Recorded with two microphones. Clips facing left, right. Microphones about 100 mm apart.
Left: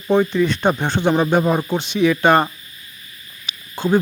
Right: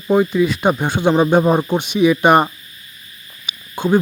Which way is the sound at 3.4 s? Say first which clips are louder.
Right 2 dB; 15° right (ahead or behind).